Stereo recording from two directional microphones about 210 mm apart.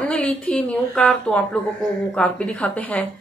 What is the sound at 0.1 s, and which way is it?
Speech, 5° left (ahead or behind).